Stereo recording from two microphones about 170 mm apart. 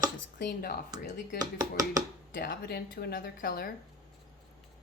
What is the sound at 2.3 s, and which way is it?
Speech, 65° left (ahead or behind).